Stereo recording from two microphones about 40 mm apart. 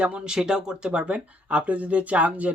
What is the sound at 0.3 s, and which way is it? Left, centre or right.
Speech, centre.